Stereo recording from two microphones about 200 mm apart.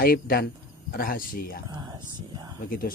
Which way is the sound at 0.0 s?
50° left (ahead or behind).